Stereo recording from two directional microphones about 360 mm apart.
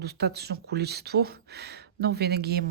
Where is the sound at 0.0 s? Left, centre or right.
Right.